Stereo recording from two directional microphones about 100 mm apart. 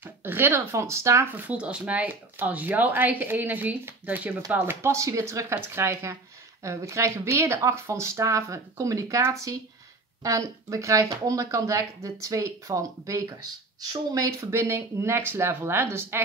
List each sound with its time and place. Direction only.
0.0 s speech: 20° right (ahead or behind)